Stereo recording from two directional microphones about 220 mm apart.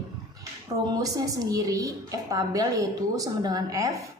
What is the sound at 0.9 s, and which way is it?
A woman's voice, 15° right (ahead or behind).